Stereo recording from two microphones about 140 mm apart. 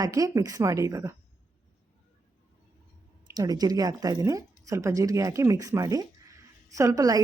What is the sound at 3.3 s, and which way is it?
Speech, 30° right (ahead or behind).